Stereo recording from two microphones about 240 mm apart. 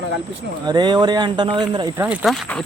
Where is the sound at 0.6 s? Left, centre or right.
Centre.